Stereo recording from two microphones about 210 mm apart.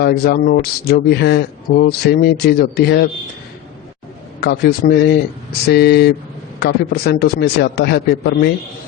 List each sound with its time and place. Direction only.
0.0 s speech: 50° left (ahead or behind)
4.4 s speech: 50° left (ahead or behind)